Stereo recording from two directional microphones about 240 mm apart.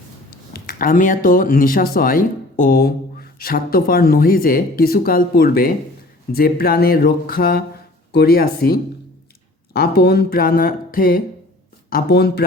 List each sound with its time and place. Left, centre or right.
0.5 s speech: left